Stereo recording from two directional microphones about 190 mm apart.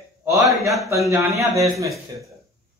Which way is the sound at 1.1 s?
15° right (ahead or behind).